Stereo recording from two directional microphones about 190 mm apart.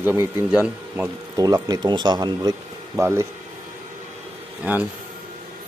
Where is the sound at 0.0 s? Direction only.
10° right (ahead or behind).